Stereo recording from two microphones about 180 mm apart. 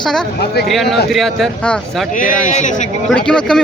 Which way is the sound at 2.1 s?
45° left (ahead or behind).